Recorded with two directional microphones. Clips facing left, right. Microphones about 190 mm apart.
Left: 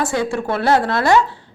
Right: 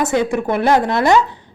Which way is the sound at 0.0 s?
20° right (ahead or behind).